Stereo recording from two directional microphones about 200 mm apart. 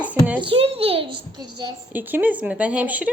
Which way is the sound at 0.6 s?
30° right (ahead or behind).